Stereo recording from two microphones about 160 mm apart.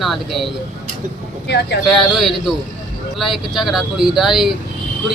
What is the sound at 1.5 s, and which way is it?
Speech, 90° left.